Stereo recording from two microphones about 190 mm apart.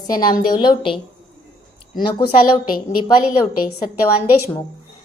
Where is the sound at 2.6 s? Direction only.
50° left (ahead or behind).